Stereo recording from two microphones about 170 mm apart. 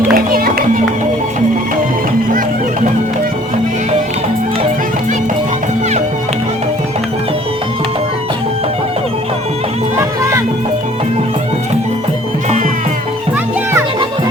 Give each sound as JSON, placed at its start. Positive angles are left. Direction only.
{"t": 0.1, "sound": "music", "side_deg": -60}
{"t": 10.0, "sound": "music", "side_deg": -15}